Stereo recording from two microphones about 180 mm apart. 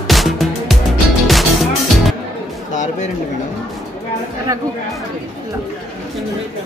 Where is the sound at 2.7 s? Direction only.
45° left (ahead or behind).